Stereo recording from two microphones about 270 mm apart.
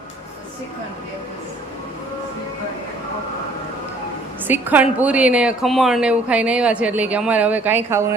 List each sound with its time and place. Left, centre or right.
4.4 s a woman's voice: centre